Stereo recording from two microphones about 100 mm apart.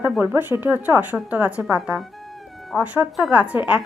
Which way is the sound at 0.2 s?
20° right (ahead or behind).